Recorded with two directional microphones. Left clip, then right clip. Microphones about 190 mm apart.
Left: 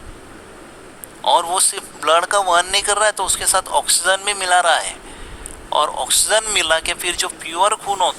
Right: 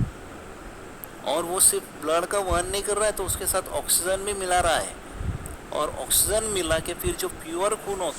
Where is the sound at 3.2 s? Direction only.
25° left (ahead or behind).